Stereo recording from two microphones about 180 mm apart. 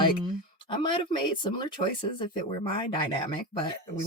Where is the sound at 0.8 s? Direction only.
25° left (ahead or behind).